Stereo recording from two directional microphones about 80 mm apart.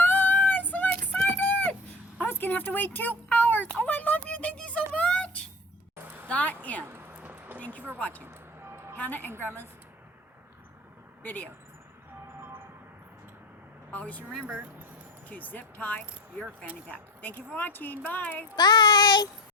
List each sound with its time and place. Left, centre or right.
0.0 s child singing: left
0.7 s a sound: left
4.9 s music: centre
6.2 s speech: centre
6.8 s a sound: right
7.6 s speech: centre
9.3 s speech: right
11.2 s speech: left
13.9 s speech: centre
14.4 s speech: right
15.3 s speech: left
17.2 s speech: left
18.5 s child singing: left